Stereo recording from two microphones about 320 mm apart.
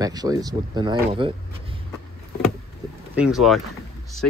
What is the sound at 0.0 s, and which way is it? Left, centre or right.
Speech, centre.